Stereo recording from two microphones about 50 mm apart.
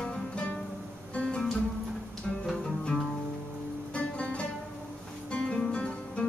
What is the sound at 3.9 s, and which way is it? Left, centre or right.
Music, left.